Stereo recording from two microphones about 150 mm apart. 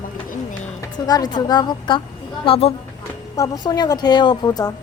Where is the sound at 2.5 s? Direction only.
40° left (ahead or behind).